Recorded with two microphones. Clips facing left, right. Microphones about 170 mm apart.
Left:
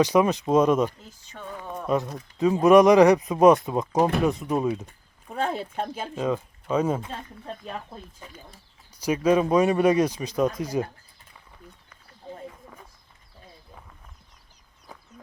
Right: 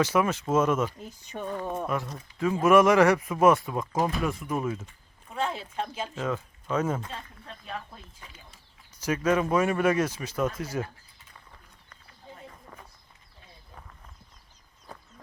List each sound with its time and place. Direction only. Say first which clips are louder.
0.0 s speech: left 5 dB; 15° left (ahead or behind)
1.2 s speech: right 5 dB; 15° right (ahead or behind)
1.9 s speech: left 6 dB; 20° left (ahead or behind)
3.9 s speech: left 6 dB; 65° left (ahead or behind)
4.2 s speech: left 6 dB; 20° left (ahead or behind)
4.9 s speech: left 6 dB; 50° left (ahead or behind)
6.1 s speech: left 6 dB; 15° left (ahead or behind)
9.0 s speech: left 4 dB; 15° left (ahead or behind)